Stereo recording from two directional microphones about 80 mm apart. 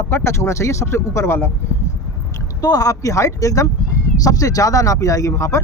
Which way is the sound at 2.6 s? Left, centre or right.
Left.